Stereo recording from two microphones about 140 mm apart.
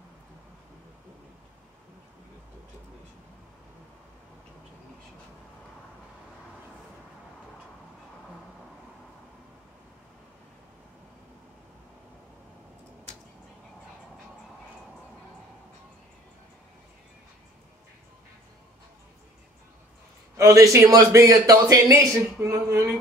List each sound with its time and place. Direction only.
20.3 s speech: 25° right (ahead or behind)